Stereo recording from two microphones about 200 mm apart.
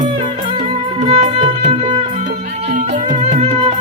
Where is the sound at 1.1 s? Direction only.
30° right (ahead or behind).